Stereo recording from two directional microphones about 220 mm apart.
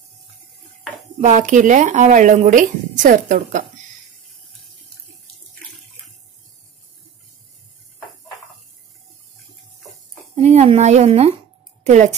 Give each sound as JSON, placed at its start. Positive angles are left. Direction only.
{"t": 1.2, "sound": "speech", "side_deg": -35}
{"t": 10.3, "sound": "speech", "side_deg": -30}